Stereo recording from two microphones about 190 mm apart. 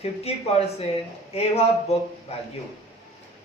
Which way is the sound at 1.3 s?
30° left (ahead or behind).